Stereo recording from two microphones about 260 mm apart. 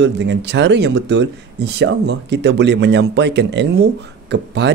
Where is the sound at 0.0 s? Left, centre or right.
Right.